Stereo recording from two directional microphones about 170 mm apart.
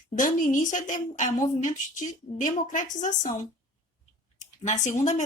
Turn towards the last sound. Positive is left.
turn(degrees=45)  # may be behind; listen again after turning